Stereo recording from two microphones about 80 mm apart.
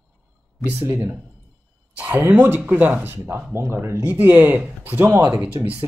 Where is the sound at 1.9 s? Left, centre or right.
Right.